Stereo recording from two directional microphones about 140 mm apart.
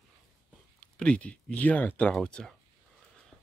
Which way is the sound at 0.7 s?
5° left (ahead or behind).